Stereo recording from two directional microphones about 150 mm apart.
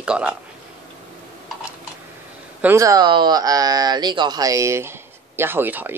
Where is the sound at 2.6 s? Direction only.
20° right (ahead or behind).